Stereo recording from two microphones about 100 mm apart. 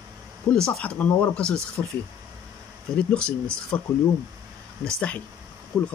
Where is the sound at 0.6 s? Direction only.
5° left (ahead or behind).